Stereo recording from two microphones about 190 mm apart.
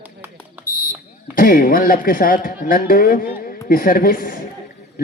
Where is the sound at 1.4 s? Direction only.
50° left (ahead or behind).